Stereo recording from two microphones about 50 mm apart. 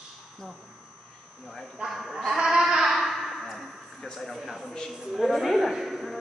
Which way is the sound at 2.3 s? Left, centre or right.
Centre.